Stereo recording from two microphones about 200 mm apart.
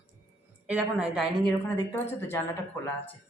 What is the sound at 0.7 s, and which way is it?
Speech, 5° right (ahead or behind).